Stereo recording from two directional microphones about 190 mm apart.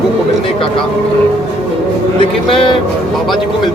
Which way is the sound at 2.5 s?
30° left (ahead or behind).